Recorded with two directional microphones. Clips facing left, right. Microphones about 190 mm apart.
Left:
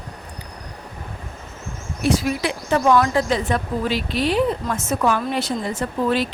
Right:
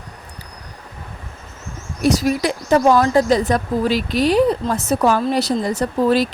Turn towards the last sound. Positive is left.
turn(degrees=-40)  # may be behind; listen again after turning